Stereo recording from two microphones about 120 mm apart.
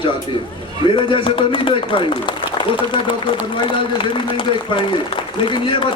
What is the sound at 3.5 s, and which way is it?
A man's voice, 45° left (ahead or behind).